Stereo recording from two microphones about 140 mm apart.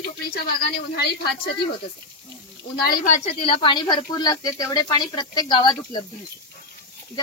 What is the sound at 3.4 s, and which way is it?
A woman's voice, 40° left (ahead or behind).